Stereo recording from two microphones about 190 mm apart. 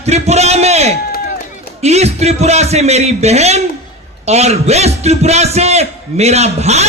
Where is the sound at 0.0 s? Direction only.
35° right (ahead or behind).